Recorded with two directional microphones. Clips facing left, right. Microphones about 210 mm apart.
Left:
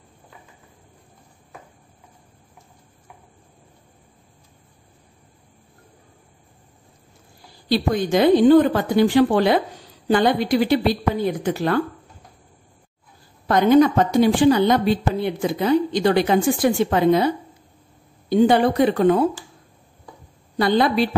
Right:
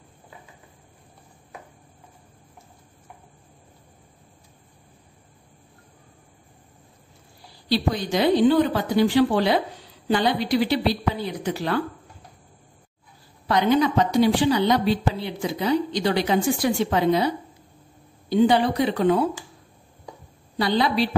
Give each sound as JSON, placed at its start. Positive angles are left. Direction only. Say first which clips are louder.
{"t": 7.6, "sound": "a woman's voice", "louder": "left 3 dB", "side_deg": 50}
{"t": 13.5, "sound": "a woman's voice", "louder": "left 5 dB", "side_deg": 50}
{"t": 18.3, "sound": "a woman's voice", "louder": "left 3 dB", "side_deg": 50}
{"t": 20.5, "sound": "a woman's voice", "louder": "left 4 dB", "side_deg": 50}